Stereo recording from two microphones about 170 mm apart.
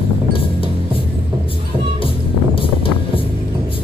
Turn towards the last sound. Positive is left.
turn(degrees=30)  # may be behind; listen again after turning